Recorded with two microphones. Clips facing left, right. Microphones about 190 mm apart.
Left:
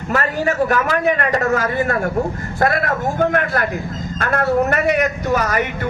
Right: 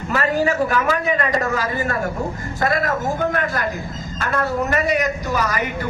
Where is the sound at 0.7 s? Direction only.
55° left (ahead or behind).